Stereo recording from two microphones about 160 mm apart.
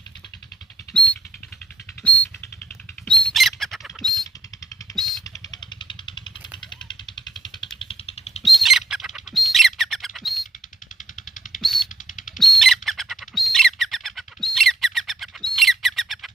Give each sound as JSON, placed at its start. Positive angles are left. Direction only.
{"t": 0.9, "sound": "rodents", "side_deg": 10}
{"t": 2.0, "sound": "mouse", "side_deg": 10}
{"t": 3.1, "sound": "bird", "side_deg": 10}
{"t": 4.9, "sound": "a sound", "side_deg": 0}
{"t": 5.5, "sound": "vehicle", "side_deg": 30}
{"t": 7.8, "sound": "a sound", "side_deg": 35}
{"t": 8.5, "sound": "bird", "side_deg": 0}
{"t": 11.6, "sound": "a sound", "side_deg": 0}
{"t": 12.4, "sound": "bird", "side_deg": 0}